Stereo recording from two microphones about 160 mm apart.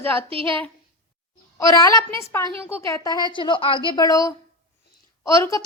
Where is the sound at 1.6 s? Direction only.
20° left (ahead or behind).